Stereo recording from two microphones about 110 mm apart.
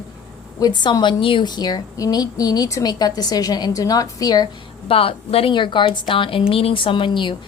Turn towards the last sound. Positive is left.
turn(degrees=45)  # may be behind; listen again after turning